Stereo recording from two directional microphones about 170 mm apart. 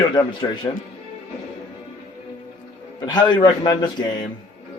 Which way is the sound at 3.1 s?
25° left (ahead or behind).